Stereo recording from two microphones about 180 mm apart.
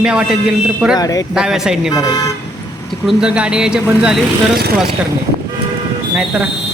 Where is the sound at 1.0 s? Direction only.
20° left (ahead or behind).